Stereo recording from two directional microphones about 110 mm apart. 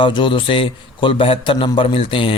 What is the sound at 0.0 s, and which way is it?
A man's voice, 45° left (ahead or behind).